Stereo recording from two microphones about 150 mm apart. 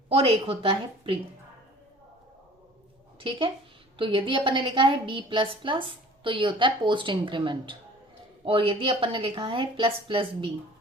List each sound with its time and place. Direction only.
0.1 s a woman's voice: 40° right (ahead or behind)
3.2 s a woman's voice: 35° right (ahead or behind)